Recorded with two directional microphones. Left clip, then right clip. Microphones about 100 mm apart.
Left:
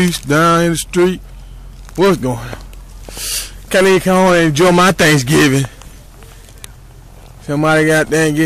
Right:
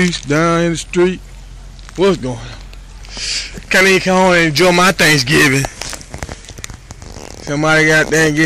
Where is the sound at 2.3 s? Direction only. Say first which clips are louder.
Left 4 dB; 90° left.